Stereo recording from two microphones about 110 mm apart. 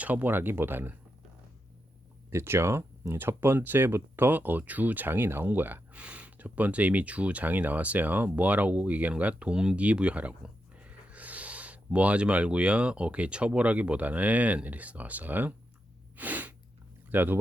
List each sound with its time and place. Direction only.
0.0 s speech: 15° right (ahead or behind)
2.3 s speech: 25° right (ahead or behind)
16.1 s a sound: 15° right (ahead or behind)
17.1 s speech: 15° right (ahead or behind)